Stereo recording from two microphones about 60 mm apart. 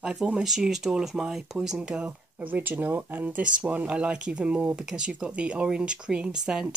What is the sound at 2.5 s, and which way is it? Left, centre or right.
Speech, right.